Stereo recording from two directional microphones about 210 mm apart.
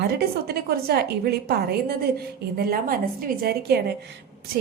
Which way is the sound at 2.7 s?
45° right (ahead or behind).